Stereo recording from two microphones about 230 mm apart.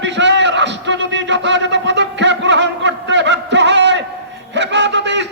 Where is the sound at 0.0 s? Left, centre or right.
Right.